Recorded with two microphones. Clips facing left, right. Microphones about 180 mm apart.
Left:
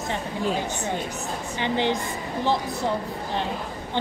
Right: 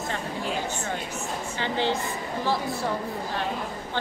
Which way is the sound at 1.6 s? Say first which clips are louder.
Left 2 dB; 15° left (ahead or behind).